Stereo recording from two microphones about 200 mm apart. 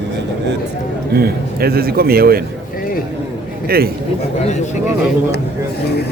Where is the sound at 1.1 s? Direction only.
50° right (ahead or behind).